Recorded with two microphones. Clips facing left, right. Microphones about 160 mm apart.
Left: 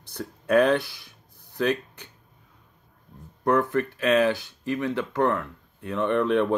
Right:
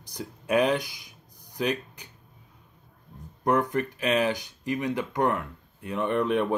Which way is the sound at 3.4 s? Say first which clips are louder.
Left 2 dB; 15° right (ahead or behind).